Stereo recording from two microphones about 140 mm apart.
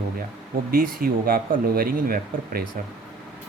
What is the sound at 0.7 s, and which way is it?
Speech, 90° right.